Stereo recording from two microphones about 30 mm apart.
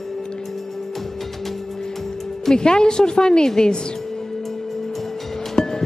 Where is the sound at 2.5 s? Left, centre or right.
Left.